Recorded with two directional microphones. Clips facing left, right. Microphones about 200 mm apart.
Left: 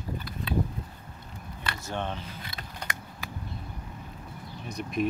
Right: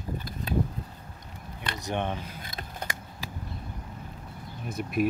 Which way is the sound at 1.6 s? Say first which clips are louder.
Right 3 dB; 20° right (ahead or behind).